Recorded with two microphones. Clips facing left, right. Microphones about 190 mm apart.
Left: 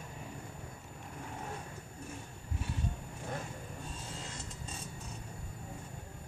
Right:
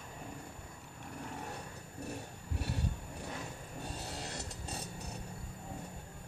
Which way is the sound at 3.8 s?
70° right (ahead or behind).